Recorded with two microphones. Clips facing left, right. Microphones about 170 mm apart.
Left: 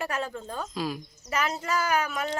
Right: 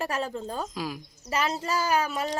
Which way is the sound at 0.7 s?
10° right (ahead or behind).